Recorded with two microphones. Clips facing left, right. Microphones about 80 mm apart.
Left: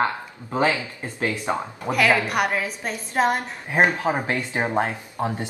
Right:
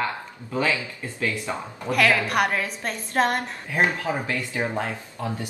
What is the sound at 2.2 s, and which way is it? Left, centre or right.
A woman's voice, centre.